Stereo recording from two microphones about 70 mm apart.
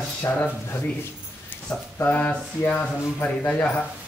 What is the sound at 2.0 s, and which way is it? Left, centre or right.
A man's voice, left.